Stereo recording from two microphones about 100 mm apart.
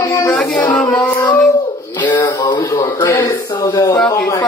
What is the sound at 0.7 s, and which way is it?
Child singing, 10° left (ahead or behind).